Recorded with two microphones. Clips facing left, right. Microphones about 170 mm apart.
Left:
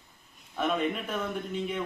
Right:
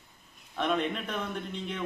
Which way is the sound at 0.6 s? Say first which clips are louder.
Left 1 dB; 5° left (ahead or behind).